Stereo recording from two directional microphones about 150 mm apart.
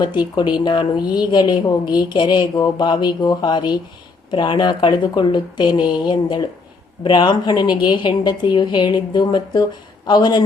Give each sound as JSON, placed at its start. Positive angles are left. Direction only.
{"t": 0.0, "sound": "a woman's voice", "side_deg": 30}